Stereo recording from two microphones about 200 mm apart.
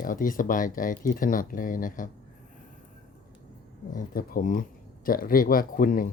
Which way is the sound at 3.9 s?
45° left (ahead or behind).